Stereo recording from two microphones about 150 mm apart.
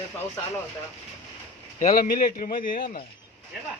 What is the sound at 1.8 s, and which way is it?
Speech, 70° left (ahead or behind).